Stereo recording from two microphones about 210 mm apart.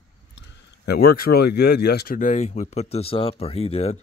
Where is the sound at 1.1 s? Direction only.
50° left (ahead or behind).